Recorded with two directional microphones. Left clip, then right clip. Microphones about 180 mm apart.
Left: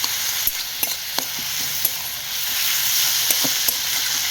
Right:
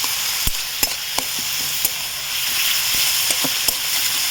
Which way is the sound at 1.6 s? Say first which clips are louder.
Right 2 dB; 20° right (ahead or behind).